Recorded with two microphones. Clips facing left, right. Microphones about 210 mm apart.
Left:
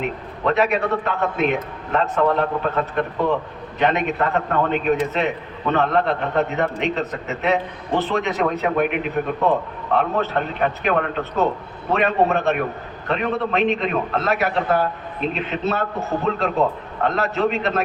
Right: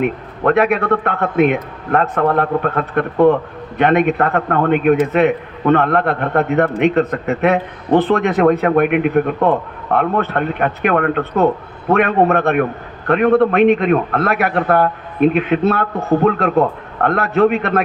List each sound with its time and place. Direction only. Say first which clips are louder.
0.0 s a man's voice: right 6 dB; 55° right (ahead or behind)